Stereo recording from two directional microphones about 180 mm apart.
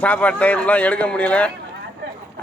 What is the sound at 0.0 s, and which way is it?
A man's voice, 10° left (ahead or behind).